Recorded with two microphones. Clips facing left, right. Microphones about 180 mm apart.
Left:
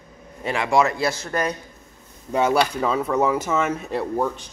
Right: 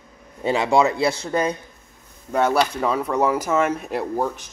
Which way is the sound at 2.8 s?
10° right (ahead or behind).